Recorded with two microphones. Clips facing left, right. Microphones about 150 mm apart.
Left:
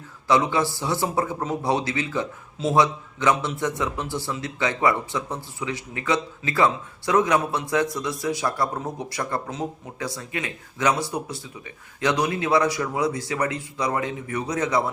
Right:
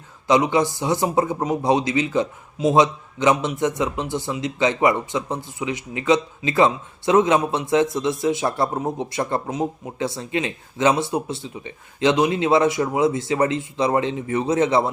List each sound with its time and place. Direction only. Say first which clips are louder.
0.3 s a man's voice: right 3 dB; 20° right (ahead or behind)